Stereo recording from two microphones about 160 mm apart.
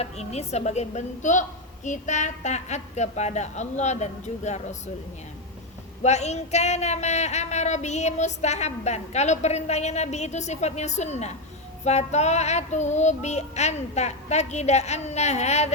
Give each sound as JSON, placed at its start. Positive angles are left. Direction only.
{"t": 0.0, "sound": "speech", "side_deg": 45}
{"t": 6.0, "sound": "speech", "side_deg": 45}